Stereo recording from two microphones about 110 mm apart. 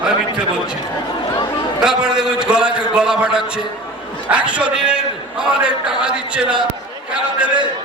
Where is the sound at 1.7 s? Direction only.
5° right (ahead or behind).